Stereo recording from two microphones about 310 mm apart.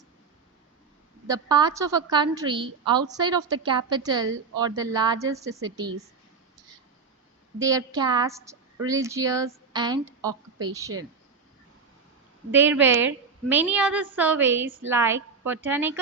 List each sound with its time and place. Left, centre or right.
1.3 s a woman's voice: centre
5.5 s a woman's voice: right
7.6 s a woman's voice: centre
12.5 s a woman's voice: centre